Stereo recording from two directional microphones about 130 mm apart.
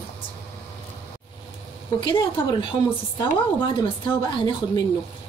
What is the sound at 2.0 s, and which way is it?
Speech, 40° left (ahead or behind).